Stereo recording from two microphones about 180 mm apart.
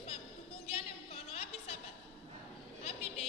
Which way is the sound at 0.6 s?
35° left (ahead or behind).